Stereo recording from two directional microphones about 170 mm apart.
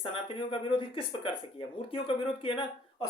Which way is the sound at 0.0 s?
30° left (ahead or behind).